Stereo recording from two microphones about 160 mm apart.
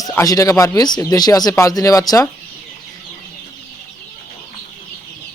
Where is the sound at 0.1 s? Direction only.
20° left (ahead or behind).